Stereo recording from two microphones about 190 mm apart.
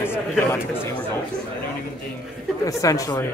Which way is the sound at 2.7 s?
15° left (ahead or behind).